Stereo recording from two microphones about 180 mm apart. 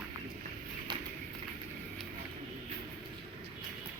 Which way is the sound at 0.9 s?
25° right (ahead or behind).